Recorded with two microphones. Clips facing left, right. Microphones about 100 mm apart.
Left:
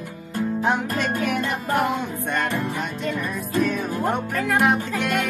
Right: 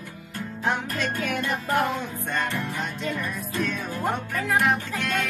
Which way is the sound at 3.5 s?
15° left (ahead or behind).